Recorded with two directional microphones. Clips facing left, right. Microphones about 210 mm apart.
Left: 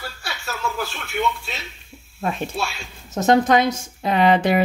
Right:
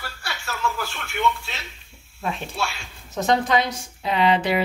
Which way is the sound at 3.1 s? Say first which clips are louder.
Left 4 dB; 50° left (ahead or behind).